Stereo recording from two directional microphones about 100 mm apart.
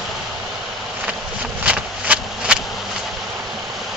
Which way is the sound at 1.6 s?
15° right (ahead or behind).